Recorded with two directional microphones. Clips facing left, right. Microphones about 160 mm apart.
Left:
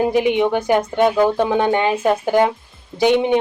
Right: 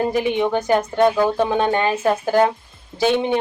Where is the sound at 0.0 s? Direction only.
15° left (ahead or behind).